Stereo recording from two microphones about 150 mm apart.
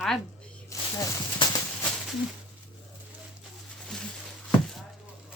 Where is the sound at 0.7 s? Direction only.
20° left (ahead or behind).